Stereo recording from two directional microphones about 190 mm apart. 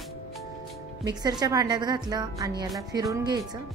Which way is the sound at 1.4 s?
20° right (ahead or behind).